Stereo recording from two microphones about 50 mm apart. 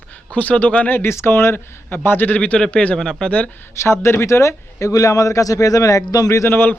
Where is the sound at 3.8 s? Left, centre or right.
Left.